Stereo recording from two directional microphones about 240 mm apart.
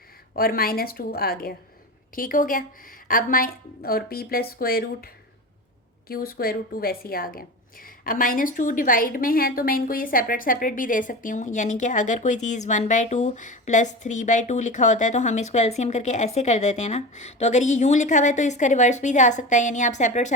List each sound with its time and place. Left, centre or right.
0.3 s speech: left
6.1 s speech: left